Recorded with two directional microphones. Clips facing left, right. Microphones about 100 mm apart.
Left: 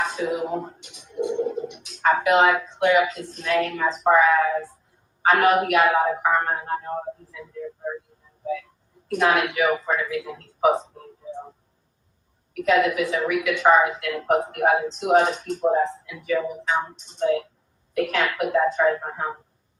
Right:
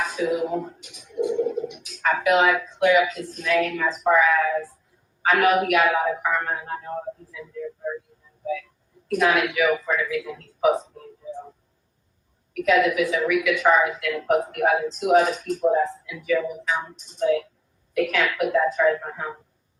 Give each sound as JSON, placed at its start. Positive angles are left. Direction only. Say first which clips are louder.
{"t": 0.0, "sound": "speech", "louder": "right 1 dB", "side_deg": 35}
{"t": 0.8, "sound": "a sound", "louder": "right 1 dB", "side_deg": 0}
{"t": 1.3, "sound": "bird", "louder": "right 1 dB", "side_deg": 35}
{"t": 1.9, "sound": "a woman's voice", "louder": "left 2 dB", "side_deg": 35}
{"t": 9.1, "sound": "speech", "louder": "even", "side_deg": 40}
{"t": 12.6, "sound": "a woman's voice", "louder": "even", "side_deg": 35}